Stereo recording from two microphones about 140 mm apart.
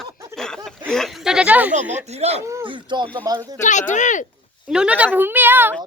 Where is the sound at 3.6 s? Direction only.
60° left (ahead or behind).